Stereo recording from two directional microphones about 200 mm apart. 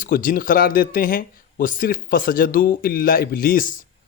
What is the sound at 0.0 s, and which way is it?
Speech, 45° left (ahead or behind).